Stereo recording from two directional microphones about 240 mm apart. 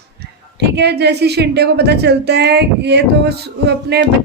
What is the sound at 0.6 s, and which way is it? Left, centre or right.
Speech, right.